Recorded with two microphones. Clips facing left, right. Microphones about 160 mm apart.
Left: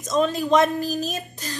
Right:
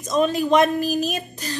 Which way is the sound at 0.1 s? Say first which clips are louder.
Right 1 dB; 15° right (ahead or behind).